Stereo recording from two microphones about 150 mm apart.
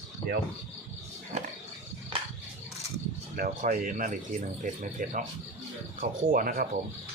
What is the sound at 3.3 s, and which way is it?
Speech, 70° right (ahead or behind).